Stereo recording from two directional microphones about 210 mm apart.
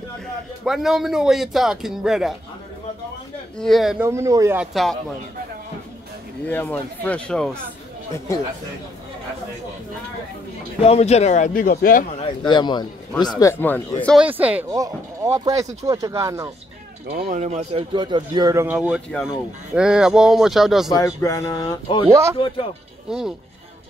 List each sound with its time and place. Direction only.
0.7 s a man's voice: centre (ahead or behind)
3.5 s a man's voice: centre (ahead or behind)
4.1 s speech: 15° right (ahead or behind)
6.4 s speech: 10° left (ahead or behind)
10.8 s speech: 30° left (ahead or behind)
12.2 s speech: 25° left (ahead or behind); by 14.1 s 10° left (ahead or behind)
14.1 s speech: 5° right (ahead or behind)
17.1 s speech: 50° right (ahead or behind)
17.4 s a man's voice: 30° right (ahead or behind); by 20.9 s centre (ahead or behind)
20.9 s speech: 15° left (ahead or behind)
22.1 s speech: 15° right (ahead or behind)
23.0 s speech: 5° right (ahead or behind)